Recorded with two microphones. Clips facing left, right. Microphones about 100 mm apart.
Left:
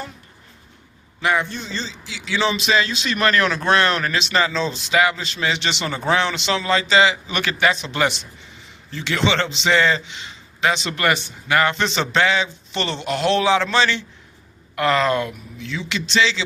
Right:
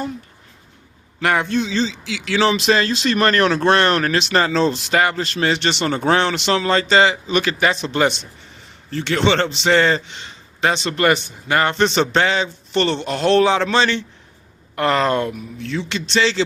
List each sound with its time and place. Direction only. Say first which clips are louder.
1.2 s a man's voice: right 3 dB; 65° right (ahead or behind)
6.7 s speech: right 1 dB; 40° right (ahead or behind)